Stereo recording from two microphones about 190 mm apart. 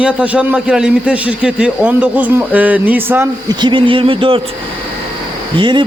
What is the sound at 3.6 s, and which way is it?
Speech, 25° right (ahead or behind).